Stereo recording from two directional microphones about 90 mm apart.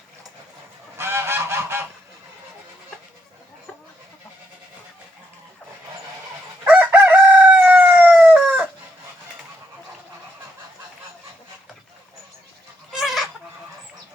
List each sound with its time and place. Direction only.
0.9 s goose: 30° right (ahead or behind)
6.7 s crowing: 15° right (ahead or behind)
12.9 s chicken: 5° right (ahead or behind)